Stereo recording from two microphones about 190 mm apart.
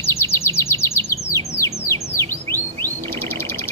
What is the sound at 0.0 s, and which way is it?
Bird, 15° left (ahead or behind).